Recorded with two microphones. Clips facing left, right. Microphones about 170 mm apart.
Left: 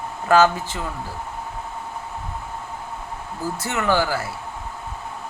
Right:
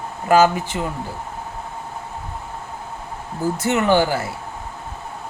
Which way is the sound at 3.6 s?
20° right (ahead or behind).